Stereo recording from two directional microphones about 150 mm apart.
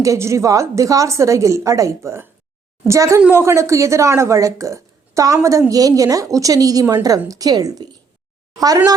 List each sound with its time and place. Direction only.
0.0 s speech: 20° right (ahead or behind)